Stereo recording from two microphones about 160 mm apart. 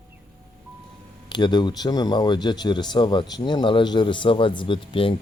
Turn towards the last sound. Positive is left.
turn(degrees=35)  # may be behind; listen again after turning